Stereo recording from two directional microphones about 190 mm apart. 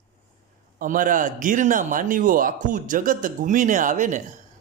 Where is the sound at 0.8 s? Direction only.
45° right (ahead or behind).